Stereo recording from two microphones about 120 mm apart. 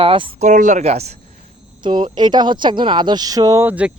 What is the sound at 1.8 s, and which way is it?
Speech, 40° right (ahead or behind).